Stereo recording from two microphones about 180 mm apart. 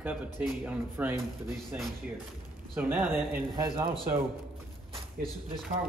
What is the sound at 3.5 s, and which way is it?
Speech, 25° right (ahead or behind).